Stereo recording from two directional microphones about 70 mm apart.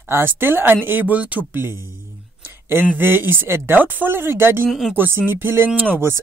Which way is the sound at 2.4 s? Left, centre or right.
Right.